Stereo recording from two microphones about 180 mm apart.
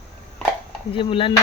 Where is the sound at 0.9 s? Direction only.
30° left (ahead or behind).